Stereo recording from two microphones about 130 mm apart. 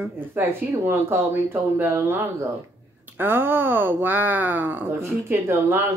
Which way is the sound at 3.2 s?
15° right (ahead or behind).